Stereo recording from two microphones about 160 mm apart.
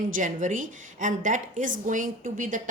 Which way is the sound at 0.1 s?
55° right (ahead or behind).